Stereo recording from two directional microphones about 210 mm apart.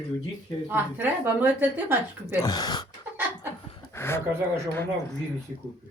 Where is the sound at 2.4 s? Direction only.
20° left (ahead or behind).